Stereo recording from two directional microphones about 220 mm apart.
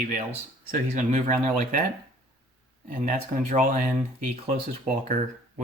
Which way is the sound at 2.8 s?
35° right (ahead or behind).